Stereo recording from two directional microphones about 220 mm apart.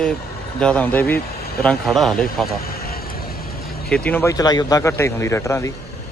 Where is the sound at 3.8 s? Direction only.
5° left (ahead or behind).